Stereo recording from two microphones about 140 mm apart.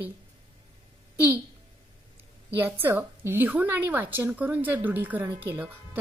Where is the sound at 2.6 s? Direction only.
15° right (ahead or behind).